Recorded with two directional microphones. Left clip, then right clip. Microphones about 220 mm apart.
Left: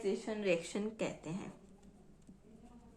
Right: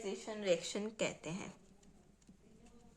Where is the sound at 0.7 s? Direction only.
25° right (ahead or behind).